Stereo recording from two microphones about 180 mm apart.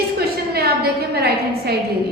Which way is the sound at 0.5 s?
60° right (ahead or behind).